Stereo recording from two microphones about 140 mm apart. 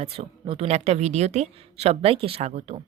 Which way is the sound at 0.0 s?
45° right (ahead or behind).